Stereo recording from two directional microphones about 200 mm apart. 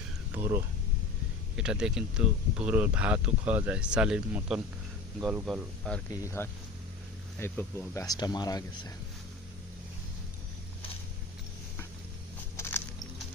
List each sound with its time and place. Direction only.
0.3 s speech: 10° right (ahead or behind)
1.5 s speech: 5° right (ahead or behind)
6.1 s speech: 15° left (ahead or behind)
12.5 s walk: 10° left (ahead or behind)